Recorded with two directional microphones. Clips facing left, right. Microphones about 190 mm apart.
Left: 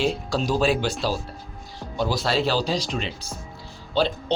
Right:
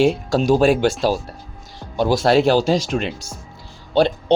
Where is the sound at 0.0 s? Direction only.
50° right (ahead or behind).